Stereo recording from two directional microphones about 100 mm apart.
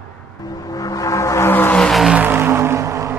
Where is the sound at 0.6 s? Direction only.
40° left (ahead or behind); by 1.7 s 25° left (ahead or behind).